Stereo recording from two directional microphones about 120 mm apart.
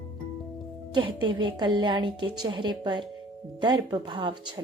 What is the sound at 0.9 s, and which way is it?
A woman's voice, 45° right (ahead or behind).